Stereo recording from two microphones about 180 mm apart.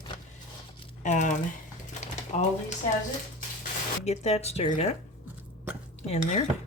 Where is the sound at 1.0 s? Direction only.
45° left (ahead or behind).